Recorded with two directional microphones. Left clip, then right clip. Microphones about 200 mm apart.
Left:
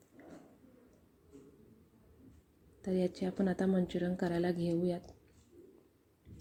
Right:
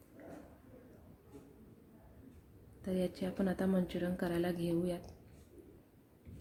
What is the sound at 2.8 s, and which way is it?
A woman's voice, 10° left (ahead or behind).